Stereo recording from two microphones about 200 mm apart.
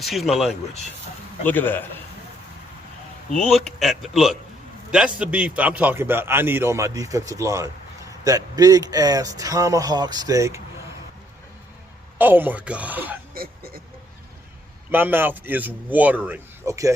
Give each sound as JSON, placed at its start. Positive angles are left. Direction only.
{"t": 0.0, "sound": "a man's voice", "side_deg": 0}
{"t": 3.3, "sound": "a man's voice", "side_deg": 0}
{"t": 12.1, "sound": "a man's voice", "side_deg": -10}
{"t": 13.3, "sound": "a sound", "side_deg": -50}
{"t": 14.8, "sound": "a man's voice", "side_deg": -10}